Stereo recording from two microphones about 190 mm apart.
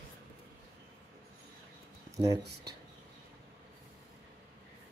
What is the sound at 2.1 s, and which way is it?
Speech, 15° right (ahead or behind).